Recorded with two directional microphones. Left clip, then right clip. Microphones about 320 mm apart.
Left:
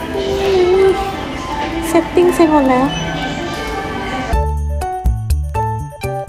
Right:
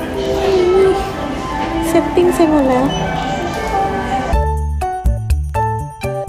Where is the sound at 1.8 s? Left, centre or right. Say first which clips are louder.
Left 1 dB; centre.